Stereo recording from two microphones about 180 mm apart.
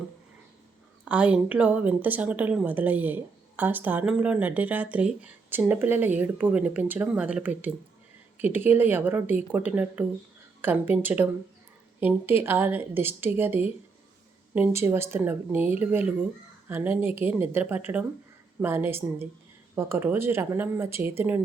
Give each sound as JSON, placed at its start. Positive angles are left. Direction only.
{"t": 1.0, "sound": "a woman's voice", "side_deg": -5}